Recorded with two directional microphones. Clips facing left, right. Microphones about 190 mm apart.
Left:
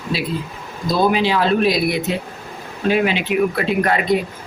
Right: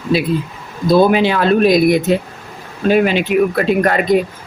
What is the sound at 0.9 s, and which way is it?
Speech, 55° right (ahead or behind).